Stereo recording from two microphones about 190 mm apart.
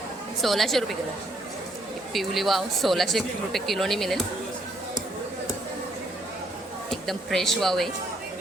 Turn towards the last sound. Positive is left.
turn(degrees=0)  # may be behind; listen again after turning